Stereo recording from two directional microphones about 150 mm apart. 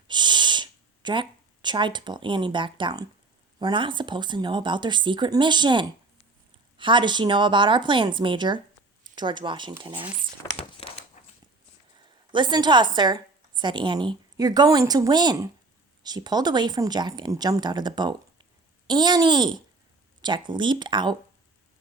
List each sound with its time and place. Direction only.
0.1 s snort: 30° right (ahead or behind)
3.6 s speech: 30° right (ahead or behind)
10.6 s a sound: 40° left (ahead or behind)
11.9 s a woman's voice: 30° right (ahead or behind)